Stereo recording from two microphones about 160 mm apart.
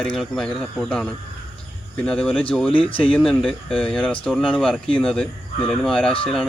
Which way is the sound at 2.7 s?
35° left (ahead or behind).